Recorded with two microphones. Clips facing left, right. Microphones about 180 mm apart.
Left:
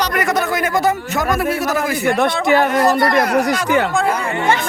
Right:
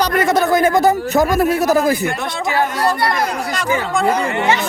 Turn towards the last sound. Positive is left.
turn(degrees=50)  # may be behind; listen again after turning